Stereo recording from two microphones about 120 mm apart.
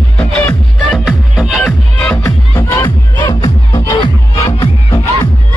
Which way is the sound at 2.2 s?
20° left (ahead or behind).